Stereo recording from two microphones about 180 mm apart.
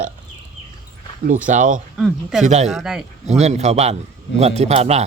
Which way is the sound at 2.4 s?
40° right (ahead or behind).